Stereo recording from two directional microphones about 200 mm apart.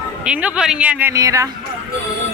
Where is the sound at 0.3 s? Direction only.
5° right (ahead or behind).